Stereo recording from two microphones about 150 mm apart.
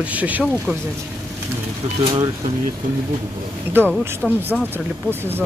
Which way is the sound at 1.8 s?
40° right (ahead or behind).